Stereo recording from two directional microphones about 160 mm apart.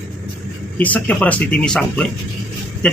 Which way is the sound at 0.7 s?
10° left (ahead or behind).